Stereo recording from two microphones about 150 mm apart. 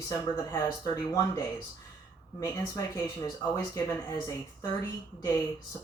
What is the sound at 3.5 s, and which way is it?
Speech, 20° left (ahead or behind).